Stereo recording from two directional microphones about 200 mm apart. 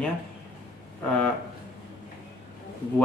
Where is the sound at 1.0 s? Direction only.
5° left (ahead or behind).